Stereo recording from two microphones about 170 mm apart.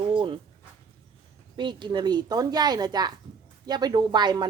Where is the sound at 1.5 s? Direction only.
30° right (ahead or behind).